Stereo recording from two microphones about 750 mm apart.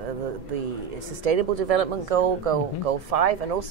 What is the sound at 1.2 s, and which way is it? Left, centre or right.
Speech, right.